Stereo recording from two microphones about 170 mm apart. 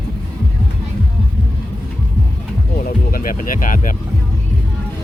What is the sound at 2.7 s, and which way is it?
Music, 60° left (ahead or behind).